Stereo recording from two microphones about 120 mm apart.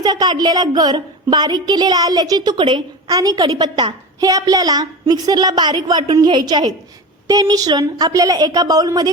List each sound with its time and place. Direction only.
0.0 s a woman's voice: 35° right (ahead or behind)